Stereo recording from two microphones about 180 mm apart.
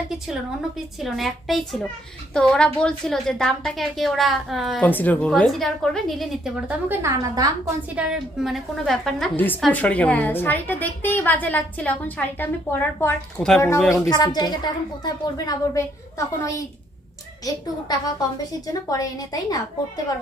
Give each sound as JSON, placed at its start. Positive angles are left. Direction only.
{"t": 0.9, "sound": "a woman's voice", "side_deg": 0}
{"t": 4.8, "sound": "a woman's voice", "side_deg": 10}
{"t": 7.9, "sound": "a woman's voice", "side_deg": -5}